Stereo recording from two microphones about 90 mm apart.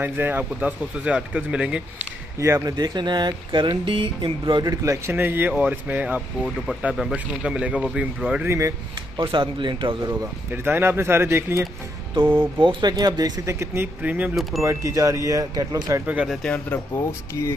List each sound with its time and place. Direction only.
0.0 s speech: 20° right (ahead or behind)
2.3 s speech: 35° right (ahead or behind)
2.8 s speech: 55° right (ahead or behind)
4.8 s speech: 35° right (ahead or behind)
5.1 s speech: 20° right (ahead or behind)
8.5 s speech: 35° right (ahead or behind)
9.1 s speech: 60° right (ahead or behind)
10.5 s speech: 25° right (ahead or behind)
12.4 s speech: 65° right (ahead or behind)
13.5 s speech: 30° right (ahead or behind)
14.0 s speech: 15° right (ahead or behind)
14.6 s speech: 35° right (ahead or behind)
16.5 s speech: 20° left (ahead or behind)